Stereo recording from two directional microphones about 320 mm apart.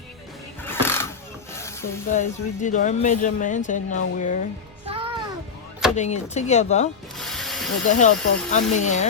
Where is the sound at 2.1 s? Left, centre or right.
Left.